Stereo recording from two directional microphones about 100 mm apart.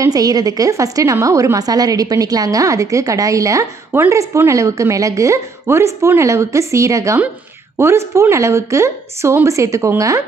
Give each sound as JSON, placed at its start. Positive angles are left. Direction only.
{"t": 0.0, "sound": "a woman's voice", "side_deg": -40}